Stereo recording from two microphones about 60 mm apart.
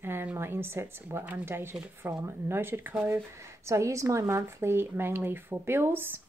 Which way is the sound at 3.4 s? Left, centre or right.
Right.